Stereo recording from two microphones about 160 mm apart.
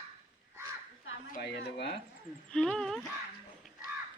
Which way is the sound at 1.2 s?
75° left (ahead or behind).